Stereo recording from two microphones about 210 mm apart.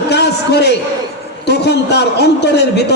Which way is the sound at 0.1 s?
55° left (ahead or behind).